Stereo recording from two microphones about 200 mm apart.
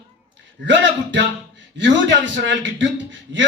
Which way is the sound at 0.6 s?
65° right (ahead or behind).